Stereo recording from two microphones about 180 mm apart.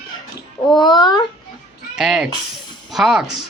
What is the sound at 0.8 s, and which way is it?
Speech, 25° left (ahead or behind).